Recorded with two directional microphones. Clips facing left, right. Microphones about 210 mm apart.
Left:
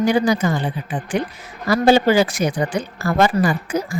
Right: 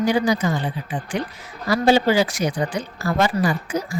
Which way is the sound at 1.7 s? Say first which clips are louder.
Left 3 dB; 50° left (ahead or behind).